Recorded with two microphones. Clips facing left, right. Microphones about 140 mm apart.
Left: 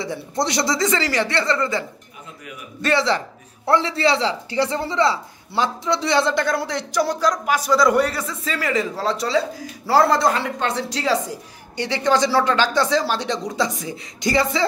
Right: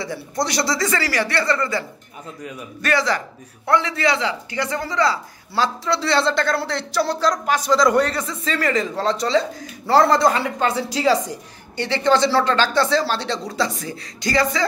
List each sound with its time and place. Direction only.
0.0 s speech: 20° left (ahead or behind); by 11.3 s centre (ahead or behind)
11.7 s speech: 15° left (ahead or behind)